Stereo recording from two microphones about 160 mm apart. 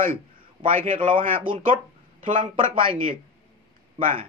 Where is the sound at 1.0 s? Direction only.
35° right (ahead or behind).